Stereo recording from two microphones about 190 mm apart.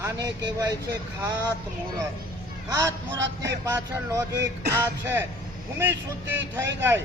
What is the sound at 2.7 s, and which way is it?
A man's voice, 15° right (ahead or behind).